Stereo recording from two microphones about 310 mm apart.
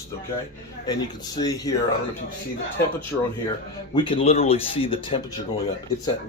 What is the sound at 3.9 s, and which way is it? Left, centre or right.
Speech, centre.